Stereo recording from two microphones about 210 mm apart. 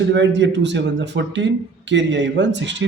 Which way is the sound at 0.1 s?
55° right (ahead or behind).